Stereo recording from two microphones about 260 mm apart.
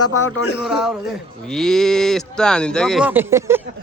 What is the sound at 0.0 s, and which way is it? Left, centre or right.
Speech, left.